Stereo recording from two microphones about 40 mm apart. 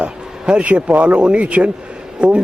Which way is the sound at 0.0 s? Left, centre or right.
Right.